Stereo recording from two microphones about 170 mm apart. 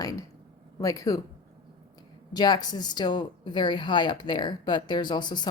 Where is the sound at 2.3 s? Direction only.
25° left (ahead or behind).